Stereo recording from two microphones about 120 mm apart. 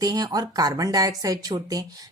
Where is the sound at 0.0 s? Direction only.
35° right (ahead or behind).